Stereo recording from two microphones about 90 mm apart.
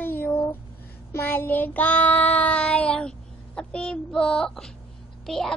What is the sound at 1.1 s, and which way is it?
Child singing, 25° left (ahead or behind).